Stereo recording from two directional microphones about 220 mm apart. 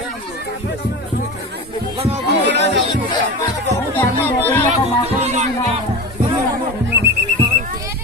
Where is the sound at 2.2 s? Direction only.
50° right (ahead or behind).